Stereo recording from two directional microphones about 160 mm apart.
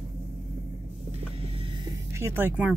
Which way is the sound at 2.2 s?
15° right (ahead or behind).